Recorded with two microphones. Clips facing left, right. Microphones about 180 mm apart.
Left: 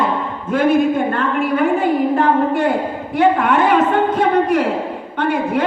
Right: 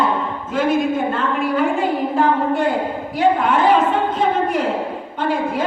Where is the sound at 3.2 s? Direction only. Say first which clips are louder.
Left 2 dB; 70° left (ahead or behind).